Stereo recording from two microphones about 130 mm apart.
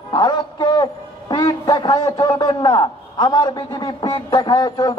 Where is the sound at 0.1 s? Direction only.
30° left (ahead or behind).